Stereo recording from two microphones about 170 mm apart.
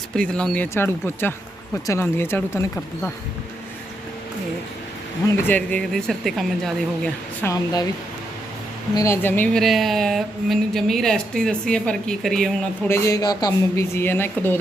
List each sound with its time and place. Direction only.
0.2 s speech: 5° left (ahead or behind)
5.3 s speech: 10° left (ahead or behind)
7.4 s speech: 20° left (ahead or behind)
9.0 s speech: 15° left (ahead or behind)
9.6 s speech: centre (ahead or behind)
12.9 s speech: 20° left (ahead or behind)